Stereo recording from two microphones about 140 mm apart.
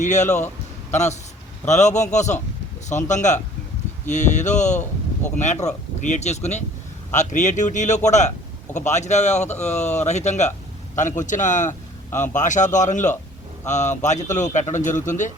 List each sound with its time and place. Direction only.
0.0 s a man's voice: 60° left (ahead or behind)